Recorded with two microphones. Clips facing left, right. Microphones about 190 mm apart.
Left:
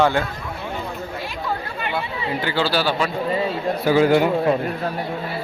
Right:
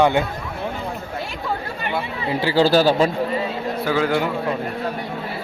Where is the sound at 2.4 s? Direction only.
30° right (ahead or behind).